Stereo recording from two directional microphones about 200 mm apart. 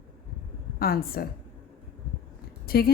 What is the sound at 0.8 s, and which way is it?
Speech, 50° left (ahead or behind).